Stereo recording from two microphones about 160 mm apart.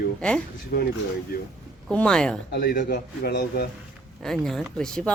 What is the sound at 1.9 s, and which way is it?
Speech, 5° left (ahead or behind).